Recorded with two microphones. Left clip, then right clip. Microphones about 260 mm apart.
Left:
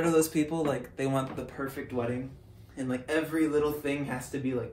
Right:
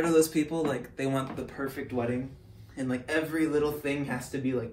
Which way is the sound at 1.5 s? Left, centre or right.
Centre.